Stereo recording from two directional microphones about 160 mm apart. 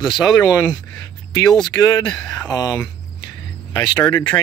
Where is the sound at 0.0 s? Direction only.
25° left (ahead or behind).